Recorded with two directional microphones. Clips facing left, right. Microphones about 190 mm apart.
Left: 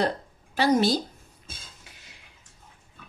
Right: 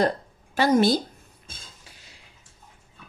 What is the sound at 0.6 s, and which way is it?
Speech, 55° right (ahead or behind).